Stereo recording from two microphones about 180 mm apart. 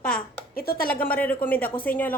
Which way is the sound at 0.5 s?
55° left (ahead or behind).